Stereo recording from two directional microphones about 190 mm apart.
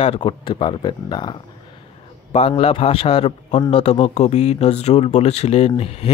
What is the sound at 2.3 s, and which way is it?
A man's voice, 30° left (ahead or behind).